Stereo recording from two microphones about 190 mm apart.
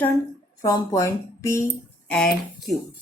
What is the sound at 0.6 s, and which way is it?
Speech, 15° left (ahead or behind).